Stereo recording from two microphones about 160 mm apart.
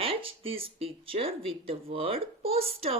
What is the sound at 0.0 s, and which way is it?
Speech, 35° right (ahead or behind).